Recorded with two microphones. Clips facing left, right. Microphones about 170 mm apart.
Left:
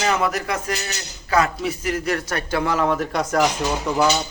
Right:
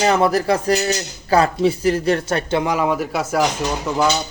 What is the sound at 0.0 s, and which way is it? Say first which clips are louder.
Speech: right 6 dB; 35° right (ahead or behind).